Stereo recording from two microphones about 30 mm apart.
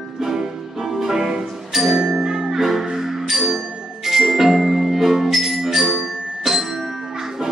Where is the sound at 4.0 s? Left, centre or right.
Centre.